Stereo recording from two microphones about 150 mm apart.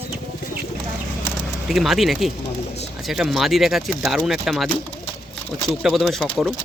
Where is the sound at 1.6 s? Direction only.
Centre (ahead or behind).